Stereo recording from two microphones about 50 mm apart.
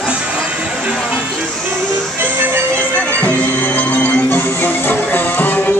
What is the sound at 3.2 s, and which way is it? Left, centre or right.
Music, left.